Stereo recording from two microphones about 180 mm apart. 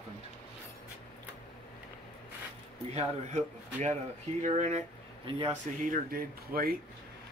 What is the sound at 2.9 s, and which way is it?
Speech, 40° right (ahead or behind).